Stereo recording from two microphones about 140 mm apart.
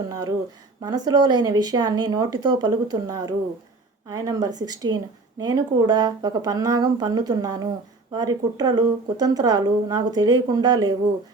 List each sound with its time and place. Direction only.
0.1 s speech: 30° right (ahead or behind)